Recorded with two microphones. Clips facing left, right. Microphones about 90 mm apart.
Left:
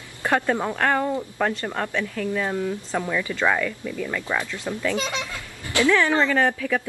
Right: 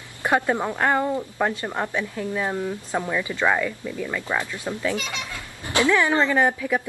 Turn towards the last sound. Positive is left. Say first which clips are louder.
# right 1 dB
turn(degrees=-15)  # may be behind; listen again after turning